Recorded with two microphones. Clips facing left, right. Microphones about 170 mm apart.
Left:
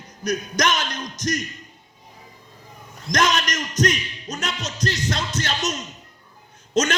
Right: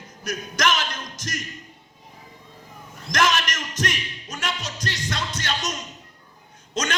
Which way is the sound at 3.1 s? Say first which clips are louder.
Left 1 dB; 40° left (ahead or behind).